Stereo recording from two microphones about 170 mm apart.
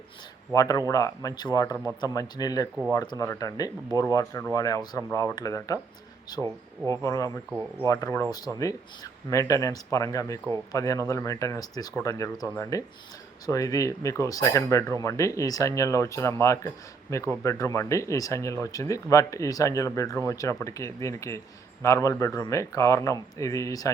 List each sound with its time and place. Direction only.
0.5 s speech: 20° left (ahead or behind)
6.4 s speech: 25° right (ahead or behind)
7.0 s speech: 20° left (ahead or behind)